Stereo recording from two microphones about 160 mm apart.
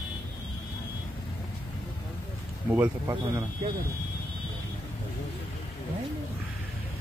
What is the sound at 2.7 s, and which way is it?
Speech, 15° right (ahead or behind).